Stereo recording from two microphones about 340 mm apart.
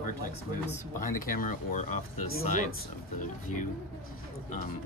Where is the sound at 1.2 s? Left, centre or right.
Left.